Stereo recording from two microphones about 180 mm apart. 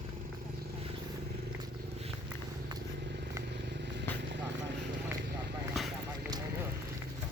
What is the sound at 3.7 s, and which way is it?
Vehicle, 75° right (ahead or behind).